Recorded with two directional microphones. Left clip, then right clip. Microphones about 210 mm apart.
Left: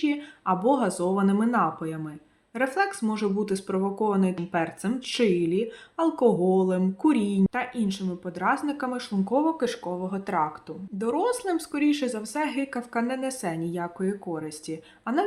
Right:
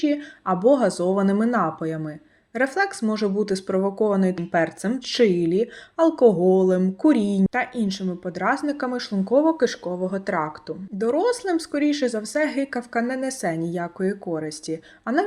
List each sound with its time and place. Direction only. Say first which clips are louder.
0.0 s speech: right 3 dB; 15° right (ahead or behind)